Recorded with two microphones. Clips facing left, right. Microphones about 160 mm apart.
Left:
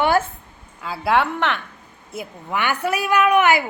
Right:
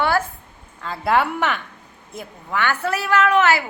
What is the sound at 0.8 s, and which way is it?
Speech, 5° left (ahead or behind).